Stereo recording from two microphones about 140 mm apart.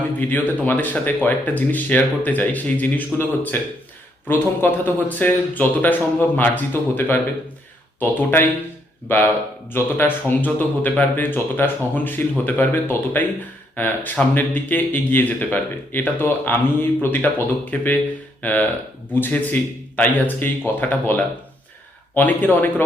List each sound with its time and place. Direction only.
0.2 s speech: 10° left (ahead or behind)